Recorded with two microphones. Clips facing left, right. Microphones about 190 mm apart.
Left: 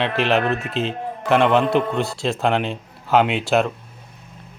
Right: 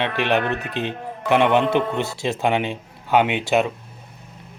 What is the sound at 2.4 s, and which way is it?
Speech, centre (ahead or behind).